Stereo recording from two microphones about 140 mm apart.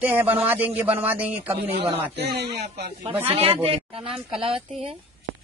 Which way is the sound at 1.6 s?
40° right (ahead or behind).